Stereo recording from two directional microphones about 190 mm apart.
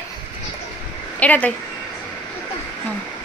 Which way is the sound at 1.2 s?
10° left (ahead or behind).